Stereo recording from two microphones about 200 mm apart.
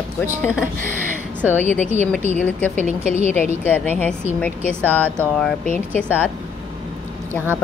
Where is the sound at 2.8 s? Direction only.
35° right (ahead or behind).